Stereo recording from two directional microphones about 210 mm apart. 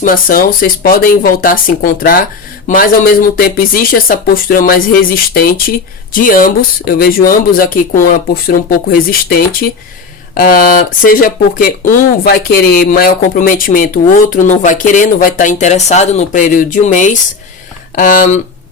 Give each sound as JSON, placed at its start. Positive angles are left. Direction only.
{"t": 0.0, "sound": "speech", "side_deg": 40}